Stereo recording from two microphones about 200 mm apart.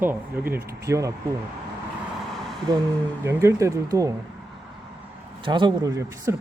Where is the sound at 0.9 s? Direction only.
15° right (ahead or behind).